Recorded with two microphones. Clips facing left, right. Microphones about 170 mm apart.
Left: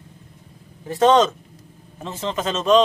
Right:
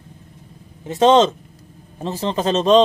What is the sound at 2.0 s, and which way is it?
Speech, 35° right (ahead or behind).